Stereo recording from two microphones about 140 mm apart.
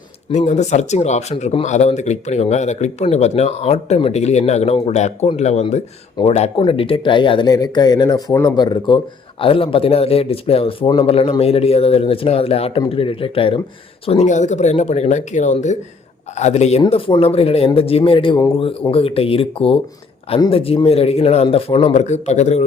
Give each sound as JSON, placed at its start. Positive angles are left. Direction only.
{"t": 0.3, "sound": "speech", "side_deg": 55}
{"t": 6.2, "sound": "speech", "side_deg": 30}